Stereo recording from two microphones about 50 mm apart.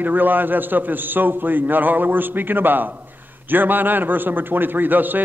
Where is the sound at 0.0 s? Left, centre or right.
Right.